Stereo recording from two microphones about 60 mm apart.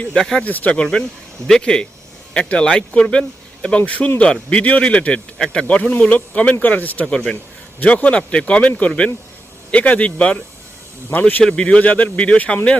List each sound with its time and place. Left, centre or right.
0.0 s speech: centre
1.5 s speech: centre; by 7.0 s left
7.0 s speech: centre
7.8 s speech: left
11.4 s speech: centre